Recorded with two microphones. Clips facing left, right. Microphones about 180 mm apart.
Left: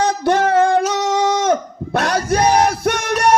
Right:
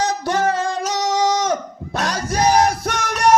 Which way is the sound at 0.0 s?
60° left (ahead or behind).